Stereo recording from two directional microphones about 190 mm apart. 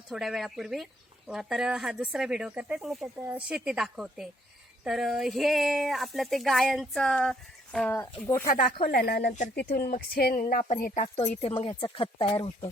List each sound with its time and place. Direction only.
0.1 s speech: centre (ahead or behind)
8.4 s speech: 50° left (ahead or behind)
11.3 s speech: 30° left (ahead or behind)